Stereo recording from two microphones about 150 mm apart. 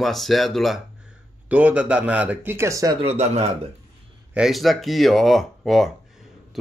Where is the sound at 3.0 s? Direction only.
45° right (ahead or behind).